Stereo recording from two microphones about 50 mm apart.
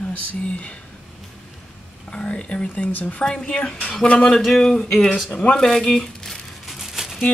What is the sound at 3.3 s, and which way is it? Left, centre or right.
Speech, centre.